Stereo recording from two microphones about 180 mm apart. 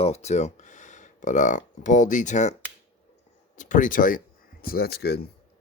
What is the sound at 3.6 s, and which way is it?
Speech, 45° left (ahead or behind).